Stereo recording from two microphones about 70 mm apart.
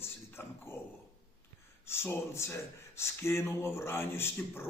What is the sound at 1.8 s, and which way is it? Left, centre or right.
Speech, left.